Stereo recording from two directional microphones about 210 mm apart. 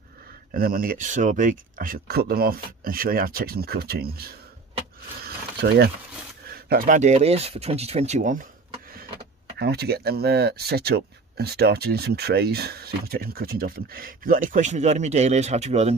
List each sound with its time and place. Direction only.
0.5 s speech: 45° right (ahead or behind)
5.2 s a sound: 50° right (ahead or behind)
6.5 s speech: 45° right (ahead or behind)
9.6 s speech: 50° right (ahead or behind); by 16.0 s 30° right (ahead or behind)